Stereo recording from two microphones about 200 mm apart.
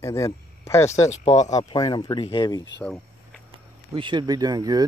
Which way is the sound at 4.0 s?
25° right (ahead or behind).